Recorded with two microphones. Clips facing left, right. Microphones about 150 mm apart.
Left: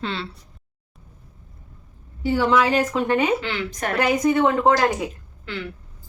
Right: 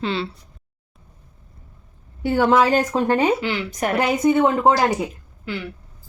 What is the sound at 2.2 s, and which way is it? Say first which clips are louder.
Speech: right 2 dB; 50° right (ahead or behind).